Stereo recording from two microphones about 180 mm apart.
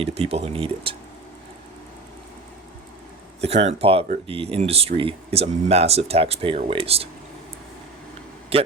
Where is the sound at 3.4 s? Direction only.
35° right (ahead or behind).